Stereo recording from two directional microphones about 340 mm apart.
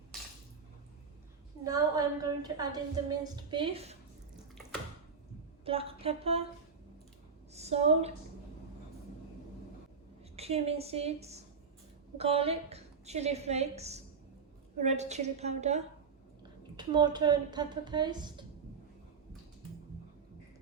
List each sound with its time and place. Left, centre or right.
1.6 s a woman's voice: centre
5.6 s a woman's voice: centre
7.5 s a woman's voice: centre
10.3 s a woman's voice: centre